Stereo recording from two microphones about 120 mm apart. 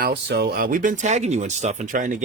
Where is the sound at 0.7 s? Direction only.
90° right.